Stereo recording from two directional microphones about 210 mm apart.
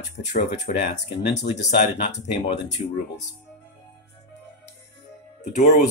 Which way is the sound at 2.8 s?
35° left (ahead or behind).